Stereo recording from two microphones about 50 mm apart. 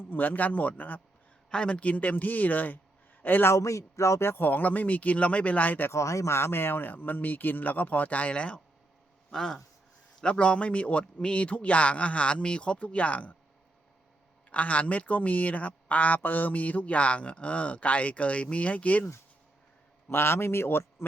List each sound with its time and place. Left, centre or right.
0.0 s speech: left
1.5 s speech: left
3.2 s a sound: left
3.4 s speech: left
4.2 s speech: left
5.9 s speech: left
9.3 s speech: centre
10.2 s speech: centre
14.5 s speech: left
20.1 s speech: left